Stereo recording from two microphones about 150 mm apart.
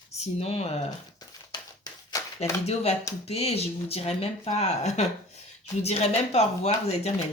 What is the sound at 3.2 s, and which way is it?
Speech, 45° left (ahead or behind).